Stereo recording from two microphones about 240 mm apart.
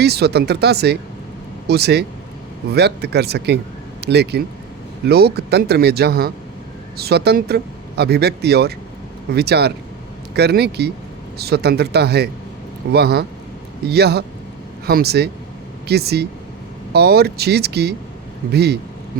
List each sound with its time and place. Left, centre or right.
0.0 s speech: right